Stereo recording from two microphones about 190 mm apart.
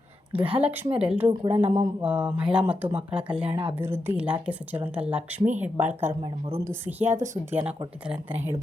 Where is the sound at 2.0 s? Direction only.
5° right (ahead or behind).